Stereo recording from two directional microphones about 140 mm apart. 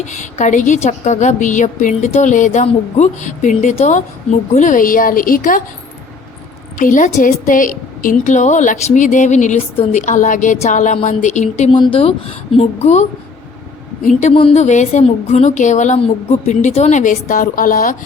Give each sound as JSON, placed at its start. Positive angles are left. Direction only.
{"t": 0.0, "sound": "a woman's voice", "side_deg": 60}
{"t": 6.7, "sound": "a woman's voice", "side_deg": 70}
{"t": 11.7, "sound": "speech", "side_deg": 35}
{"t": 12.5, "sound": "a woman's voice", "side_deg": 55}